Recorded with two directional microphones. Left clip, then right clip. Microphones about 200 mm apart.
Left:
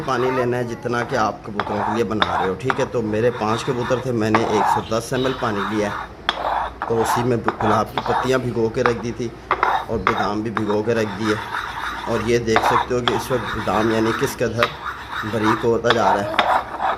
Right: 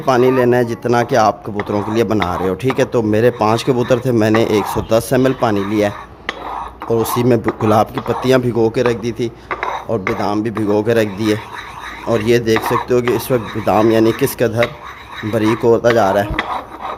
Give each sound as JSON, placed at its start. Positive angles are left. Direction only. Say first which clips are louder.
{"t": 0.0, "sound": "speech", "louder": "right 8 dB", "side_deg": -55}
{"t": 7.2, "sound": "speech", "louder": "right 5 dB", "side_deg": -55}